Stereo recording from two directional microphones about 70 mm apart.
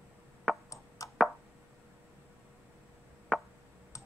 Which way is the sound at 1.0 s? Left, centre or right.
Left.